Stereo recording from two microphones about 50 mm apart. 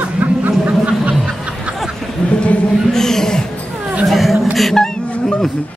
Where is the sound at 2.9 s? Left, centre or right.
Centre.